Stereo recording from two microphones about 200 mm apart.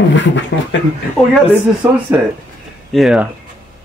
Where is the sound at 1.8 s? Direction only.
10° right (ahead or behind).